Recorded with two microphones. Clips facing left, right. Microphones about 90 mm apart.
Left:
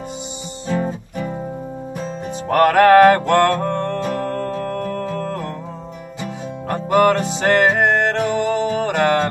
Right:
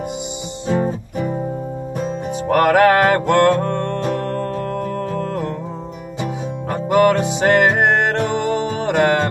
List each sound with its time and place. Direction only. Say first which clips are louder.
0.7 s music: right 3 dB; 25° right (ahead or behind)
2.5 s mantra: left 2 dB; 10° right (ahead or behind)
3.7 s music: right 1 dB; 10° right (ahead or behind)
6.7 s music: right 1 dB; 10° right (ahead or behind)